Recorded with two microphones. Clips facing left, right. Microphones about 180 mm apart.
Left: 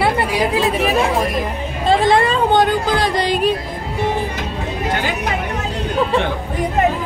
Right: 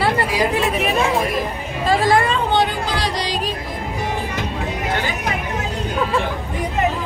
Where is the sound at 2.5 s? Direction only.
50° left (ahead or behind).